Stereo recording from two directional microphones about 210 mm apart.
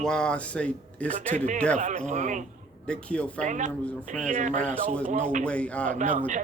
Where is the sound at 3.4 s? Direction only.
35° right (ahead or behind).